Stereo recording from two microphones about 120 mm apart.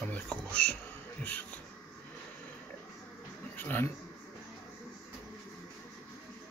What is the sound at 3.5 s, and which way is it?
Speech, 15° left (ahead or behind).